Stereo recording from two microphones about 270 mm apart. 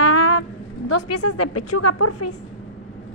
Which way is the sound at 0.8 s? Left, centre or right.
Left.